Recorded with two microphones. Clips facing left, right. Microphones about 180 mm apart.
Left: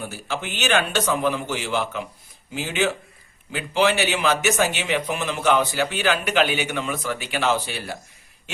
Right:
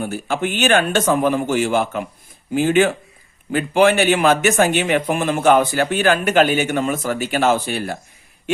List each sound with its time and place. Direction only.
0.0 s speech: 55° right (ahead or behind)